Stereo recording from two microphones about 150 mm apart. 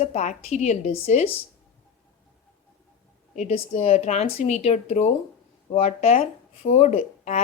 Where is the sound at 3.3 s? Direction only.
50° left (ahead or behind).